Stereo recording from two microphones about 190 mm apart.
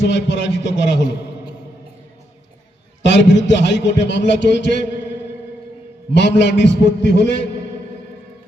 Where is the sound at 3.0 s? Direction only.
65° left (ahead or behind).